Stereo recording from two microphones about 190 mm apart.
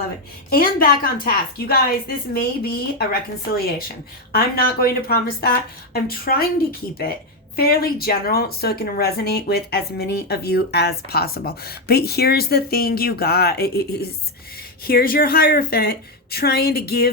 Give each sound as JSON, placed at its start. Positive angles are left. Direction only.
{"t": 0.5, "sound": "speech", "side_deg": 50}